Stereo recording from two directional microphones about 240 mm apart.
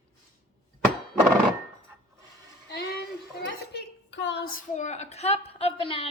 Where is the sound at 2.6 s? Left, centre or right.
Left.